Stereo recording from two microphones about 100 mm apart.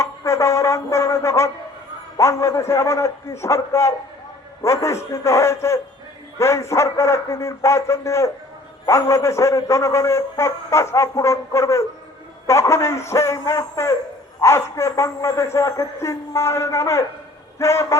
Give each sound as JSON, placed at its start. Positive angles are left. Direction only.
{"t": 0.0, "sound": "music", "side_deg": 30}
{"t": 2.1, "sound": "a man's voice", "side_deg": 30}